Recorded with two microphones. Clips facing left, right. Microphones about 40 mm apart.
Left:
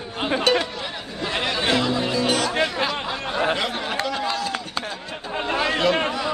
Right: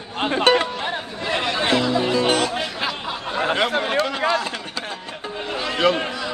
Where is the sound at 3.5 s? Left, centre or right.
Right.